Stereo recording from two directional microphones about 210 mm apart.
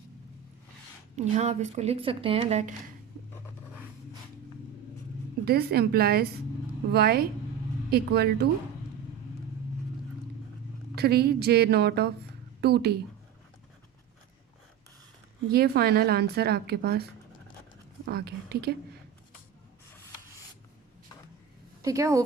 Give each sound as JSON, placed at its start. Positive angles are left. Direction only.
{"t": 1.1, "sound": "speech", "side_deg": -30}
{"t": 5.5, "sound": "a woman's voice", "side_deg": -50}
{"t": 10.9, "sound": "a woman's voice", "side_deg": -50}
{"t": 15.5, "sound": "a woman's voice", "side_deg": -50}
{"t": 21.8, "sound": "a woman's voice", "side_deg": -15}